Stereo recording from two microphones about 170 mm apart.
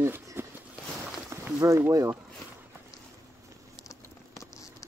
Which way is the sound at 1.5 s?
20° right (ahead or behind).